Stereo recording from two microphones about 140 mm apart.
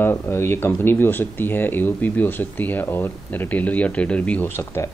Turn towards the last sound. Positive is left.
turn(degrees=15)  # may be behind; listen again after turning